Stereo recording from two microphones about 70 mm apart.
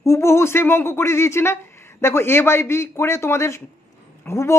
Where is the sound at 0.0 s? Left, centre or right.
Left.